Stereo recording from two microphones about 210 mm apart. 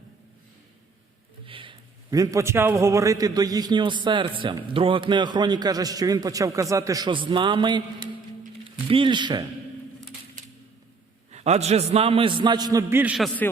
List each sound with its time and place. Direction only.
1.5 s a man's voice: 25° right (ahead or behind)
8.9 s a man's voice: 25° right (ahead or behind)
11.3 s a man's voice: 30° right (ahead or behind); by 13.5 s 5° left (ahead or behind)